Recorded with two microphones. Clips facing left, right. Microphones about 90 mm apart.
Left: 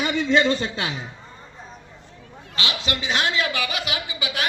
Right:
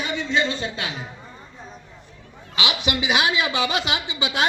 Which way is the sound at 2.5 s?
15° right (ahead or behind).